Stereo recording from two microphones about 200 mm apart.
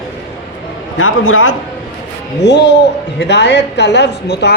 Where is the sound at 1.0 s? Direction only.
90° left.